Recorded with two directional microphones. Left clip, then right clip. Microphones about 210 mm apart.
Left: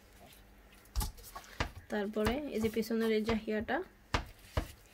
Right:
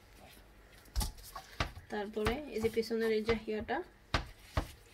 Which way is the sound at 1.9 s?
50° left (ahead or behind).